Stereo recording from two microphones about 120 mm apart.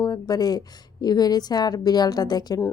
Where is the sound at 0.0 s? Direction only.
35° left (ahead or behind).